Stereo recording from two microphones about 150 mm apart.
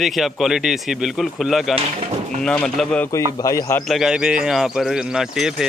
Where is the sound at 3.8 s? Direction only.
Centre (ahead or behind).